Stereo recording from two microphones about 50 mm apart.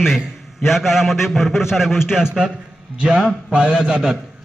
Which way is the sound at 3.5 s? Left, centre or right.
Right.